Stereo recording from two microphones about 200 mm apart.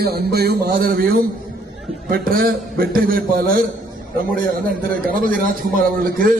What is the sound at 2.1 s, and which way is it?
A man's voice, 45° right (ahead or behind).